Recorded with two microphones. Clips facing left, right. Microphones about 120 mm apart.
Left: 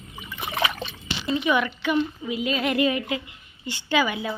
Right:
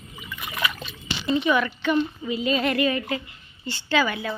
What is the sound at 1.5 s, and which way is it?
A woman's voice, 15° left (ahead or behind).